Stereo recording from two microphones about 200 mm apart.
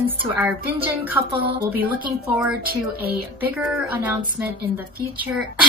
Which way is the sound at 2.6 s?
50° right (ahead or behind).